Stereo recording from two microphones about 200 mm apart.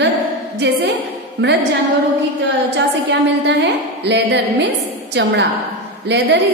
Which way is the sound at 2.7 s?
60° right (ahead or behind).